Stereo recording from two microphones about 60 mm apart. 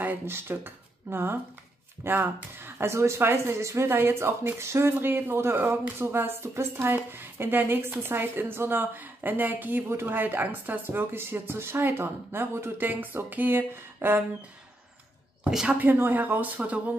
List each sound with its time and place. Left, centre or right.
0.3 s speech: right
2.9 s speech: right
9.8 s speech: right
15.7 s speech: right